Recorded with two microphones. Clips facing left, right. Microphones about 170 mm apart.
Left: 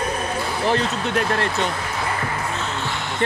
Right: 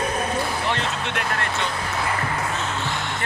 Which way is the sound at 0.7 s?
35° left (ahead or behind).